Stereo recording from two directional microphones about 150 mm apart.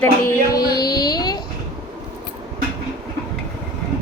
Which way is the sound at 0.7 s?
25° left (ahead or behind).